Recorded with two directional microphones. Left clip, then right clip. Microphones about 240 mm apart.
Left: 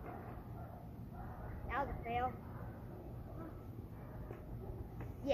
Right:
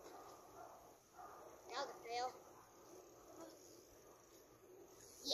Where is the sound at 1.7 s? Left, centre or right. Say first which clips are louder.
Left 7 dB; centre.